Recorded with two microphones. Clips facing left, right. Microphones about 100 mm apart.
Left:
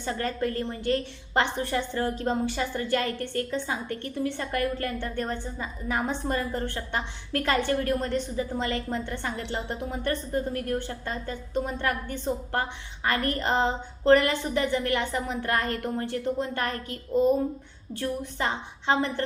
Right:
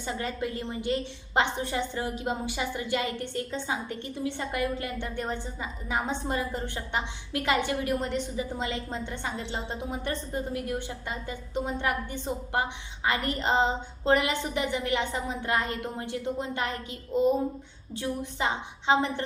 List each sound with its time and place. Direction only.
0.0 s a woman's voice: 15° right (ahead or behind)